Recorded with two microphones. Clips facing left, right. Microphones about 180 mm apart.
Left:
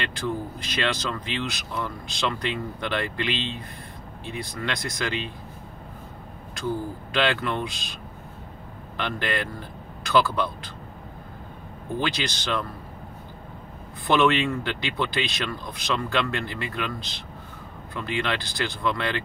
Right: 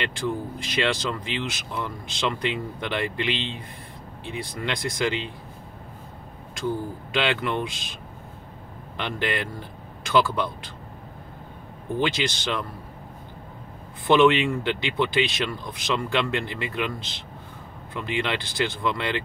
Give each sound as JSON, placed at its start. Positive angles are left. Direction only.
{"t": 0.7, "sound": "speech", "side_deg": -20}
{"t": 6.6, "sound": "speech", "side_deg": -20}
{"t": 8.9, "sound": "speech", "side_deg": -20}
{"t": 12.0, "sound": "speech", "side_deg": -20}
{"t": 14.0, "sound": "speech", "side_deg": -20}
{"t": 17.9, "sound": "speech", "side_deg": -20}